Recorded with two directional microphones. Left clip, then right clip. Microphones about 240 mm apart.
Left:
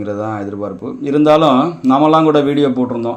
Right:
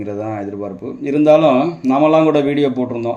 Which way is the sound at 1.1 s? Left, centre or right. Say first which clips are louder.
Left 1 dB; centre.